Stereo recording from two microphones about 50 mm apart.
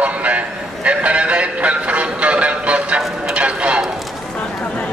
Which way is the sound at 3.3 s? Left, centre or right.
Right.